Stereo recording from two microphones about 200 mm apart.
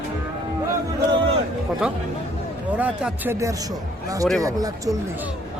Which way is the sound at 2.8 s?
5° right (ahead or behind).